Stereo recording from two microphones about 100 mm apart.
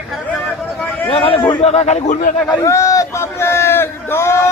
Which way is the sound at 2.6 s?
30° left (ahead or behind).